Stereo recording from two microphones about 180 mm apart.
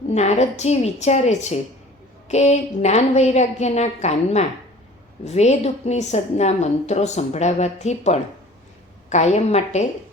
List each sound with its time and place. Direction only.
0.1 s a woman's voice: 40° left (ahead or behind)